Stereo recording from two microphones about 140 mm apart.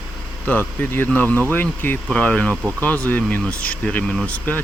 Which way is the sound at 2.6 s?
20° right (ahead or behind).